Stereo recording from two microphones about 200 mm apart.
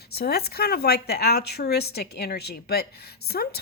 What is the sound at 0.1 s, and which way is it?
A woman's voice, 50° left (ahead or behind).